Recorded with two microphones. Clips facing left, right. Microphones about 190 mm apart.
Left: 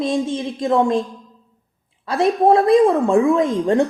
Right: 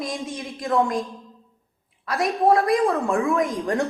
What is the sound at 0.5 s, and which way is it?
Speech, 20° left (ahead or behind).